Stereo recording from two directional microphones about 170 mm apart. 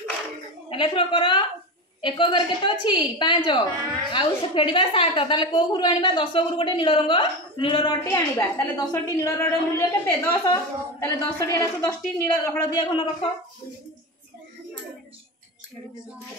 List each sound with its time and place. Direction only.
0.7 s a woman's voice: 30° left (ahead or behind)